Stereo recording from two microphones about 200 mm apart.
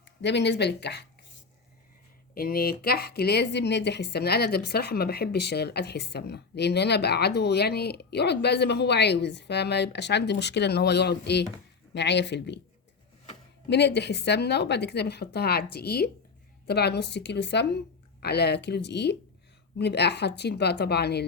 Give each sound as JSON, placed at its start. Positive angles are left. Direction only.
{"t": 0.0, "sound": "speech", "side_deg": 60}
{"t": 2.3, "sound": "speech", "side_deg": 50}
{"t": 13.7, "sound": "speech", "side_deg": 60}